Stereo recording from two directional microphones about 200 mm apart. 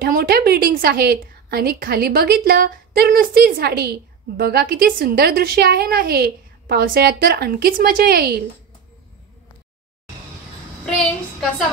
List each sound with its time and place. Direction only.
0.0 s a woman's voice: 50° right (ahead or behind)